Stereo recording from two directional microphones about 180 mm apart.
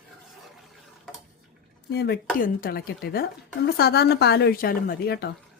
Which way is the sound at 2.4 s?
55° left (ahead or behind).